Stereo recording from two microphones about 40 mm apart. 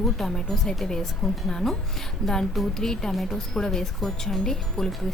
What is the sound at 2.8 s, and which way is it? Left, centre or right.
Speech, centre.